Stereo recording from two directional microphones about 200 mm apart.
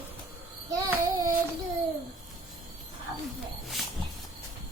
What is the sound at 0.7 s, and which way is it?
Babbling, 20° right (ahead or behind).